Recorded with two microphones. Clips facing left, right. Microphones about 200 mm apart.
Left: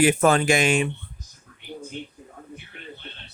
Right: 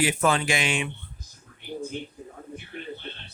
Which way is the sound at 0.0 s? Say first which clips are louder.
Left 5 dB; 50° left (ahead or behind).